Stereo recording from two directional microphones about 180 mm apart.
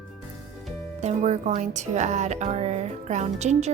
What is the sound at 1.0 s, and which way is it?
Speech, 40° right (ahead or behind).